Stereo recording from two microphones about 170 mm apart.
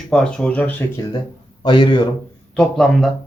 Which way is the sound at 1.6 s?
30° left (ahead or behind).